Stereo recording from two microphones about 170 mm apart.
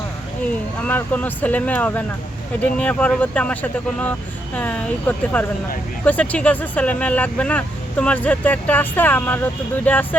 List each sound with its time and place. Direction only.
0.8 s speech: 10° left (ahead or behind)